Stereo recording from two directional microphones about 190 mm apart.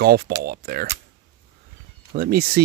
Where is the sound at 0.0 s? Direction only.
55° right (ahead or behind).